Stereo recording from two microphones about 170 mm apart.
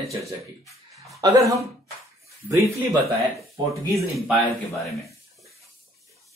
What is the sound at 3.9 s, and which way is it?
Speech, centre (ahead or behind).